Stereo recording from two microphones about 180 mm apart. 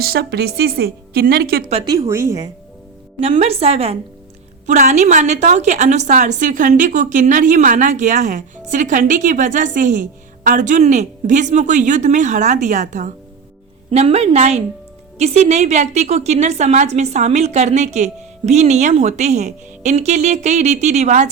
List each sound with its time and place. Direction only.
0.0 s a woman's voice: 60° right (ahead or behind)
1.7 s a woman's voice: 30° right (ahead or behind)
3.2 s a woman's voice: 35° right (ahead or behind)